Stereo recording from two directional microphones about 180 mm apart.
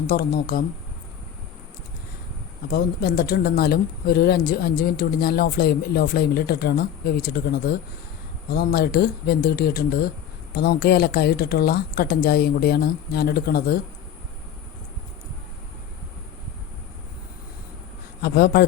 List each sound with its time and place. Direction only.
0.1 s speech: 55° left (ahead or behind)
2.7 s speech: 55° left (ahead or behind)
18.2 s a man's voice: 60° left (ahead or behind)